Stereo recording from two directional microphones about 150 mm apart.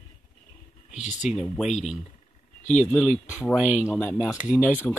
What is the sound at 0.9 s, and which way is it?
Speech, 50° left (ahead or behind).